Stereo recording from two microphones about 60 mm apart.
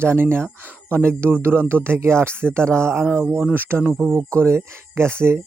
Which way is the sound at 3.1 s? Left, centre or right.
Right.